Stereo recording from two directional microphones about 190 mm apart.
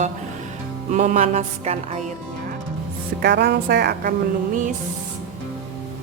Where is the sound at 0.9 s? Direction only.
40° right (ahead or behind).